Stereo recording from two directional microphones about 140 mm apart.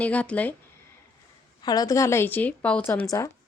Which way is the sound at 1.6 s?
25° left (ahead or behind).